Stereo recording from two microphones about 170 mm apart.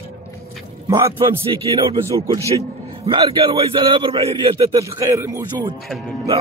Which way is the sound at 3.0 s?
35° right (ahead or behind).